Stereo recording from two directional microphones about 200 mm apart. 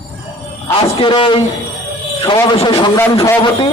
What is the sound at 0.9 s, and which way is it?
A man's voice, 25° left (ahead or behind).